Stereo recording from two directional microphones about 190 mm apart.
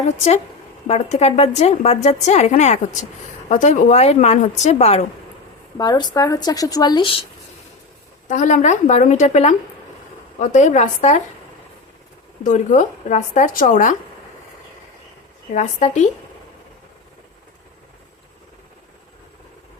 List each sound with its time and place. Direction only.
0.9 s a woman's voice: 35° left (ahead or behind)
5.7 s speech: 20° left (ahead or behind)
8.3 s a woman's voice: 40° left (ahead or behind)
12.4 s a woman's voice: 40° left (ahead or behind)
15.5 s a woman's voice: 40° left (ahead or behind)